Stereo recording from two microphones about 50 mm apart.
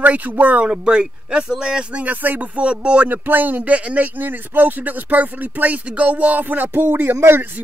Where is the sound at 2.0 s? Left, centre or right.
Right.